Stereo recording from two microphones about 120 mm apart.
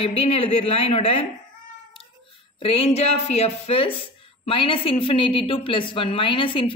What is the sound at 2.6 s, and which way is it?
A woman's voice, 55° left (ahead or behind).